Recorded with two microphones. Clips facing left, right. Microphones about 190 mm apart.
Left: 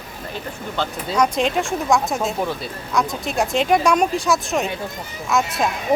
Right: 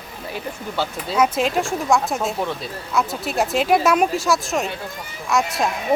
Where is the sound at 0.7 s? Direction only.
5° right (ahead or behind).